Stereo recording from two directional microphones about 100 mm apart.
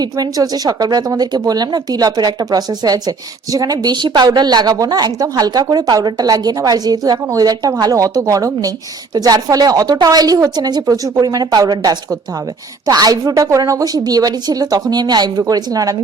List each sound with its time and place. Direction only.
0.0 s speech: 40° right (ahead or behind)